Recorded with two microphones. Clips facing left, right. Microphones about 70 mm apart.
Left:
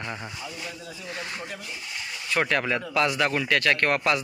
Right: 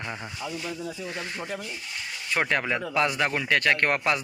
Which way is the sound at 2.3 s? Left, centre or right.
Right.